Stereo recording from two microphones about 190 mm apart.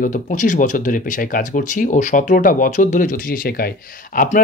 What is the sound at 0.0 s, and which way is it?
Speech, 45° left (ahead or behind).